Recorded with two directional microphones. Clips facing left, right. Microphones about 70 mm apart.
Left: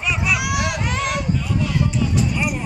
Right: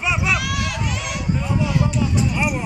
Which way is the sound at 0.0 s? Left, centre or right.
Centre.